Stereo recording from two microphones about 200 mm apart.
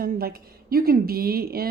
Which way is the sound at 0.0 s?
50° right (ahead or behind).